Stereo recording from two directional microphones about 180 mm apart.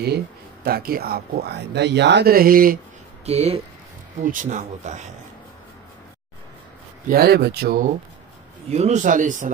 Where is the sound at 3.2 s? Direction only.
35° right (ahead or behind).